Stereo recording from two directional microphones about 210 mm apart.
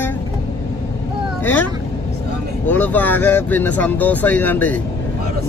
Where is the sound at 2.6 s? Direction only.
10° left (ahead or behind).